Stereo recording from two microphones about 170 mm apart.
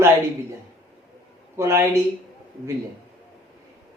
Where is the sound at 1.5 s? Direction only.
15° right (ahead or behind).